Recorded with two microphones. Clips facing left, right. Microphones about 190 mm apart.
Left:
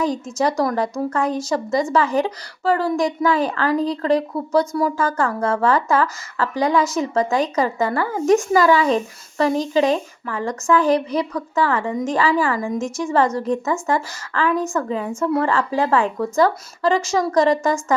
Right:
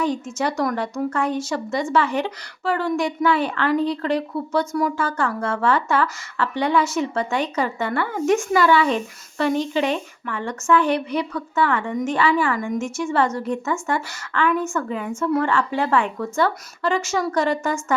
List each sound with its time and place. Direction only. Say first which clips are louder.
0.0 s speech: left 2 dB; 35° left (ahead or behind)